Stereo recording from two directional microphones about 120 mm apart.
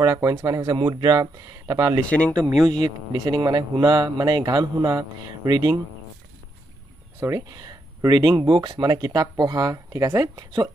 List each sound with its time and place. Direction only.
0.0 s speech: 25° right (ahead or behind)
2.0 s speech: 10° left (ahead or behind)
3.1 s speech: 35° right (ahead or behind)
7.2 s speech: 25° right (ahead or behind)